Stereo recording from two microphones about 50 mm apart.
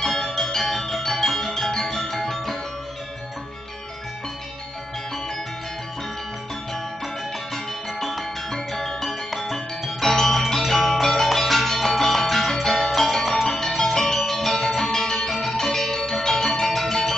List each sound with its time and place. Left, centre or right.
0.0 s music: centre
7.5 s music: centre